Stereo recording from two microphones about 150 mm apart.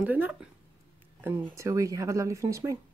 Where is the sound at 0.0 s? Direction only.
10° right (ahead or behind).